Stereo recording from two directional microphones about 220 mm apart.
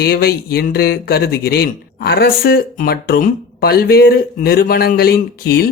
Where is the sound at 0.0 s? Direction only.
45° left (ahead or behind).